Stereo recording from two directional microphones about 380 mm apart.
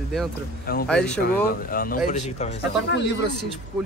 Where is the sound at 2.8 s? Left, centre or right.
Left.